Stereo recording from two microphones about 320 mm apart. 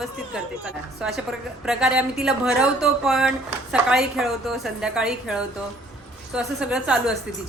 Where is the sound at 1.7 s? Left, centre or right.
Centre.